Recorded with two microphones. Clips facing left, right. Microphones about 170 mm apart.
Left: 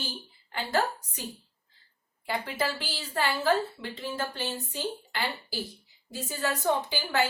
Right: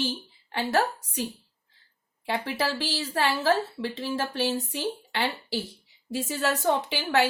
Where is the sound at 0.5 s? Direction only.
75° right (ahead or behind).